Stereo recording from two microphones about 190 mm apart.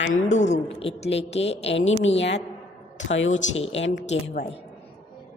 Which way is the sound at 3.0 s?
80° left.